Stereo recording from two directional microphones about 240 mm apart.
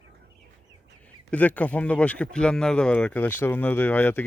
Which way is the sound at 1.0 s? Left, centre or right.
Centre.